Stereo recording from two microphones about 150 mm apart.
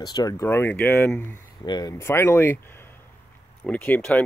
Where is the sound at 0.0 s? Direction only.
25° left (ahead or behind).